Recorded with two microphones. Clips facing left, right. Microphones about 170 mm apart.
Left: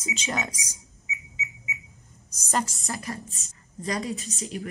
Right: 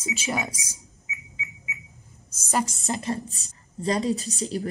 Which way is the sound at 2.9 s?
25° right (ahead or behind).